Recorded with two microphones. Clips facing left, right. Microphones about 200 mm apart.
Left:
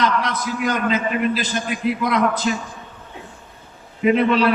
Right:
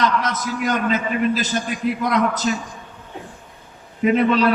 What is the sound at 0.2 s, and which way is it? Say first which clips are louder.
Speech: even; 45° right (ahead or behind).